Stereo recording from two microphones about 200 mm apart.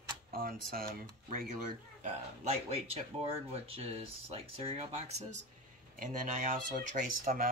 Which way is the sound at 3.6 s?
30° right (ahead or behind).